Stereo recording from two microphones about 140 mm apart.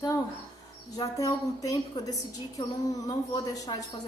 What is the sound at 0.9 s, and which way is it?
A woman's voice, 25° left (ahead or behind).